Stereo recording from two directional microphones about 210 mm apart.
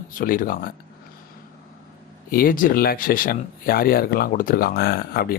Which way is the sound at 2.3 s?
45° left (ahead or behind).